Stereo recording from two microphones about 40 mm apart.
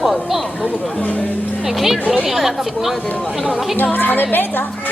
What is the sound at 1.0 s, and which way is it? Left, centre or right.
Speech, left.